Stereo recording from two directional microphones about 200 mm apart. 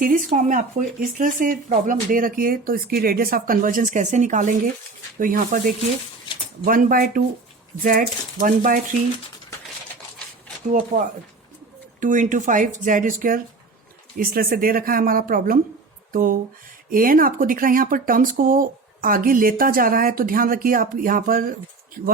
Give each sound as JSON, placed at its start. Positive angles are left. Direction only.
{"t": 0.0, "sound": "speech", "side_deg": -40}
{"t": 6.7, "sound": "speech", "side_deg": -45}
{"t": 10.7, "sound": "speech", "side_deg": -40}